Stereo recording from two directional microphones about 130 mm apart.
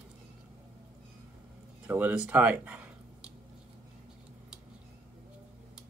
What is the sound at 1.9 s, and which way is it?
Speech, 10° right (ahead or behind).